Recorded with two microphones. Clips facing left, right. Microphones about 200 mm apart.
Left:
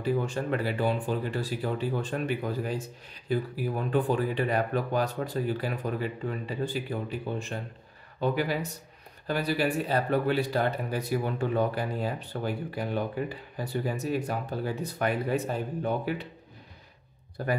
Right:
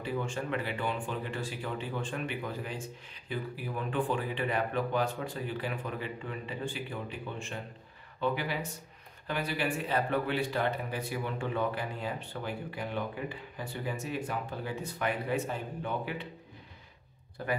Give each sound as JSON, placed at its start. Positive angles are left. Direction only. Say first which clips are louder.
{"t": 0.0, "sound": "speech", "louder": "left 6 dB", "side_deg": 40}
{"t": 17.4, "sound": "speech", "louder": "left 4 dB", "side_deg": 40}